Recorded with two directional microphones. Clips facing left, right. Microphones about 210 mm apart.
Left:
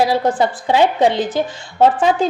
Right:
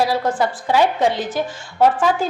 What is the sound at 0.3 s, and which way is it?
A woman's voice, 20° left (ahead or behind).